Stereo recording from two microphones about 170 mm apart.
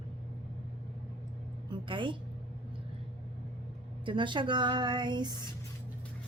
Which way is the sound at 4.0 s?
30° right (ahead or behind).